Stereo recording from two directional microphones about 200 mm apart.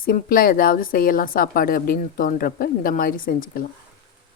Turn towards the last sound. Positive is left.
turn(degrees=45)  # may be behind; listen again after turning